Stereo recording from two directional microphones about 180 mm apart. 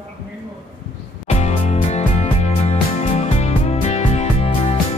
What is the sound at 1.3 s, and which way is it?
Music, 40° left (ahead or behind).